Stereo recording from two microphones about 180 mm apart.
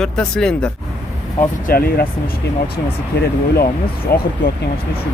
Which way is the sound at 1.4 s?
50° left (ahead or behind).